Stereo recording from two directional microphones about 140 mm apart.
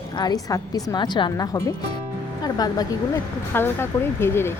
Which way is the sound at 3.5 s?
15° left (ahead or behind).